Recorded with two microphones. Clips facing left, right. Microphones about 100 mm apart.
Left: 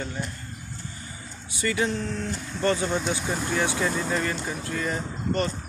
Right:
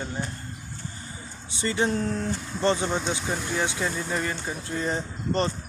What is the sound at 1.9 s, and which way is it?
Speech, 40° right (ahead or behind).